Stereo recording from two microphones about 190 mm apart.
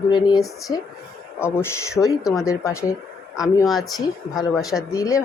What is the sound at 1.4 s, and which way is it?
Speech, 10° left (ahead or behind).